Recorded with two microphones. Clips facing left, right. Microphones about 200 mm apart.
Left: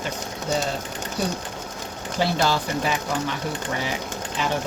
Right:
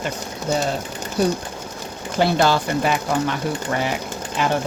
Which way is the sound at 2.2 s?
60° right (ahead or behind).